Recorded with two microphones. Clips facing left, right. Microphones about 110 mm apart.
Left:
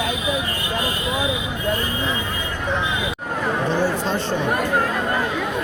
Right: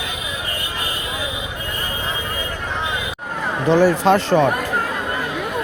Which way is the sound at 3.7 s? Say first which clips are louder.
Right 12 dB; 90° right.